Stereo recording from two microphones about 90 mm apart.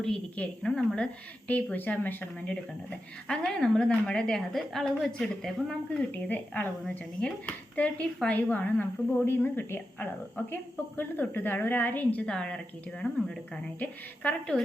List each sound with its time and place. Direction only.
0.0 s a woman's voice: 10° left (ahead or behind)
6.1 s speech: 15° left (ahead or behind)
12.2 s a woman's voice: 10° left (ahead or behind)